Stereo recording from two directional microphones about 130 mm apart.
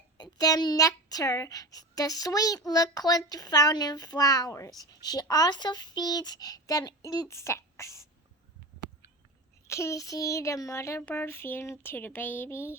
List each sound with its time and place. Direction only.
0.2 s speech: 30° left (ahead or behind)
9.6 s speech: 20° left (ahead or behind)